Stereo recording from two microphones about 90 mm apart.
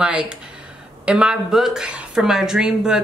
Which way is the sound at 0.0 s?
10° right (ahead or behind).